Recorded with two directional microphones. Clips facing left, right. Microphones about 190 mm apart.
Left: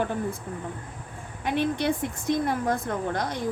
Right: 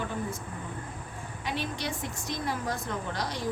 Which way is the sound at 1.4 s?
55° left (ahead or behind).